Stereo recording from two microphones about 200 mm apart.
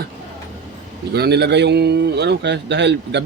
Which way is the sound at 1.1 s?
55° right (ahead or behind).